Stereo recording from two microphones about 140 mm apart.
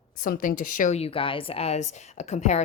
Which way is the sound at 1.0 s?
40° left (ahead or behind).